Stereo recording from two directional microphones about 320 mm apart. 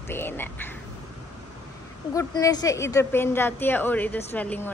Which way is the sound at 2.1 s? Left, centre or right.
Centre.